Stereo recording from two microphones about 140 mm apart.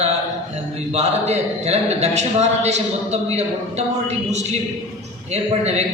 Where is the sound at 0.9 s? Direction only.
50° right (ahead or behind).